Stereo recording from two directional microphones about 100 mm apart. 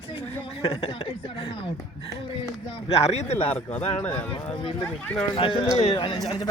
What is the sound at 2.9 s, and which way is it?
Speech, 90° left.